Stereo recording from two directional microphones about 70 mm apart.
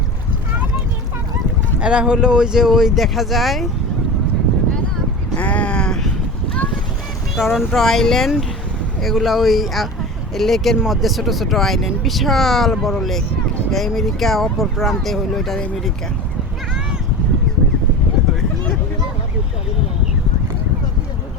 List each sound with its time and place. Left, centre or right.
1.8 s speech: centre
5.4 s a sound: centre
7.3 s speech: centre